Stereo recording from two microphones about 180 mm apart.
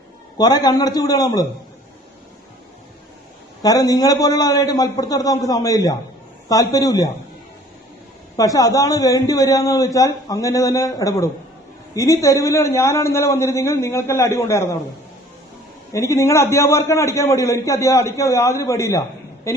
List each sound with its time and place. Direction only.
0.3 s a man's voice: 20° left (ahead or behind)
3.6 s a man's voice: 20° left (ahead or behind)
8.4 s a man's voice: 20° left (ahead or behind)
15.9 s a man's voice: 15° left (ahead or behind)